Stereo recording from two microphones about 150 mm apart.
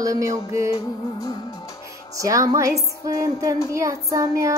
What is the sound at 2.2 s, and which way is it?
Music, 20° right (ahead or behind).